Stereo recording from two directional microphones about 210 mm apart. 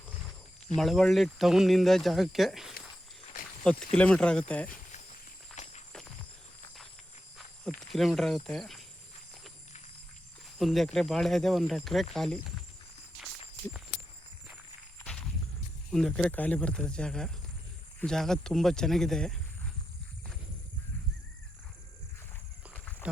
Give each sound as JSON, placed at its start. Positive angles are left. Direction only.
{"t": 0.8, "sound": "speech", "side_deg": 0}
{"t": 5.6, "sound": "walk", "side_deg": 35}
{"t": 7.8, "sound": "speech", "side_deg": 0}
{"t": 10.6, "sound": "speech", "side_deg": 0}
{"t": 15.9, "sound": "speech", "side_deg": 0}
{"t": 22.7, "sound": "a sound", "side_deg": 5}